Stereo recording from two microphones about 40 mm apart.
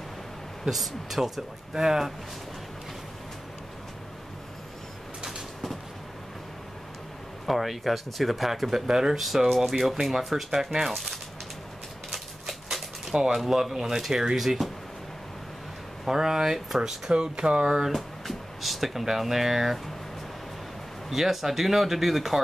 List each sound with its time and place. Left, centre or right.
0.7 s speech: centre
7.4 s speech: centre
9.2 s speech: centre
10.9 s speech: centre
12.1 s a sound: centre
13.1 s speech: centre
16.1 s speech: centre
17.1 s speech: right
17.9 s speech: centre
21.1 s speech: centre